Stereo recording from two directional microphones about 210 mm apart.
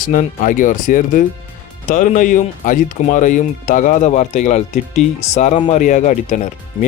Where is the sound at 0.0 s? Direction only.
40° left (ahead or behind).